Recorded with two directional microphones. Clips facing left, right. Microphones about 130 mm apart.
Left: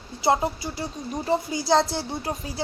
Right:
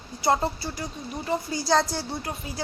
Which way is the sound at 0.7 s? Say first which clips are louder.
Left 3 dB; 30° left (ahead or behind).